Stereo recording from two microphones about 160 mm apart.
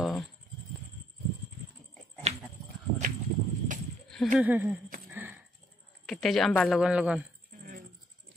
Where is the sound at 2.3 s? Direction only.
40° right (ahead or behind).